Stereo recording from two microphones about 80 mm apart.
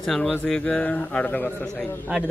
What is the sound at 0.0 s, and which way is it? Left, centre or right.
Speech, centre.